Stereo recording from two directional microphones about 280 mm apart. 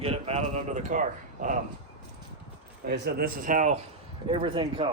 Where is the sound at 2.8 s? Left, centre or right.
Right.